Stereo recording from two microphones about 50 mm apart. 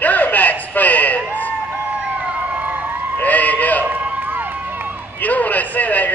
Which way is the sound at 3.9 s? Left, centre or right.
Right.